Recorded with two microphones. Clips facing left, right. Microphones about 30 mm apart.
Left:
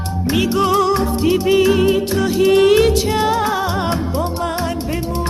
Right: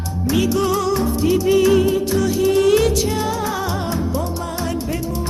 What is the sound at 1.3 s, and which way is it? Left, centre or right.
Music, left.